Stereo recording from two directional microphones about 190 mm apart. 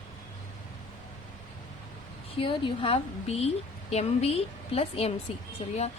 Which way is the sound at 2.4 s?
30° left (ahead or behind).